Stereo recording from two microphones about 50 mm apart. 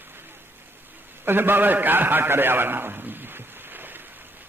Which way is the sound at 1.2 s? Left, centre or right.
Right.